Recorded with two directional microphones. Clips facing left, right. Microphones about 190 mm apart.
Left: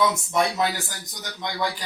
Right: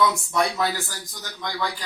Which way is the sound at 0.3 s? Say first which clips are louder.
Left 1 dB; 20° left (ahead or behind).